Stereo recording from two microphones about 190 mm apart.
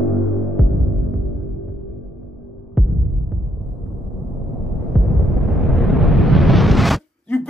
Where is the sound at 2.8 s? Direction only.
Centre (ahead or behind).